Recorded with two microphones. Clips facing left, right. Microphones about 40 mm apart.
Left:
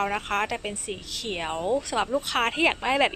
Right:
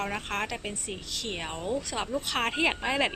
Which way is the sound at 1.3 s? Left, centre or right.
Centre.